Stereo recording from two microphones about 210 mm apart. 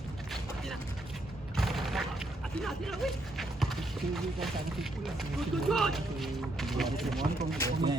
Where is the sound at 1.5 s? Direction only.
Centre (ahead or behind).